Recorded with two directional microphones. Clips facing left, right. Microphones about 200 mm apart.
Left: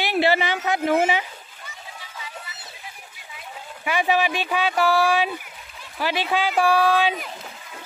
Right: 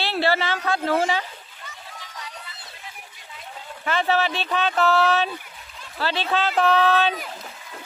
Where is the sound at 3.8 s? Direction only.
15° left (ahead or behind).